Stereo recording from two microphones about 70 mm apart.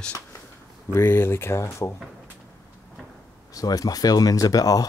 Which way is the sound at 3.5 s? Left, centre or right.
Left.